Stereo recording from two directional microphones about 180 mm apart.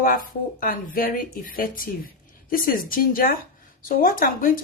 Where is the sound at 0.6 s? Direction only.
50° left (ahead or behind).